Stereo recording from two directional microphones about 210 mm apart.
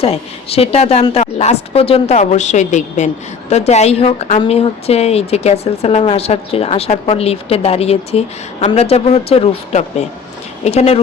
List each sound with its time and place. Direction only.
0.0 s a woman's voice: 30° left (ahead or behind)